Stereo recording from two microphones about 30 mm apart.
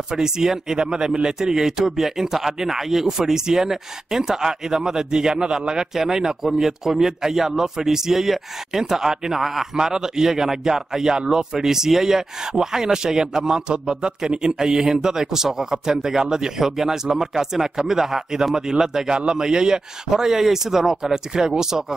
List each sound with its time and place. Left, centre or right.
0.1 s a man's voice: centre
5.9 s a man's voice: centre